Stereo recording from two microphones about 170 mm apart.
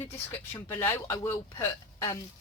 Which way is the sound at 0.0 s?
15° left (ahead or behind).